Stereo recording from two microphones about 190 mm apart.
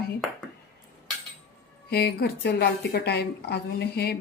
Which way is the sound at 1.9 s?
55° left (ahead or behind).